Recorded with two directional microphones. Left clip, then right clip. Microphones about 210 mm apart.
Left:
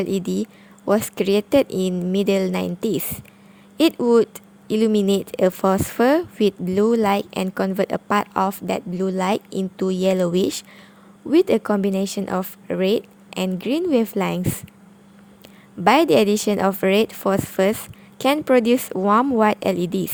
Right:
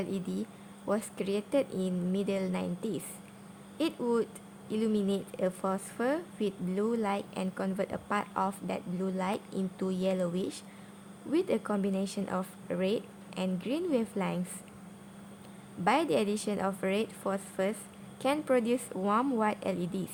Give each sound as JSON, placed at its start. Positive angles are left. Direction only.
{"t": 0.0, "sound": "a woman's voice", "side_deg": 40}
{"t": 15.8, "sound": "a woman's voice", "side_deg": 40}